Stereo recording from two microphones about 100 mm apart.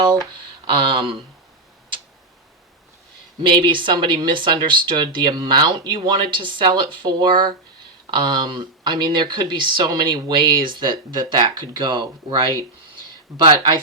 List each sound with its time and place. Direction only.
0.0 s speech: 45° right (ahead or behind)
0.7 s speech: 55° right (ahead or behind)
3.4 s speech: 55° right (ahead or behind)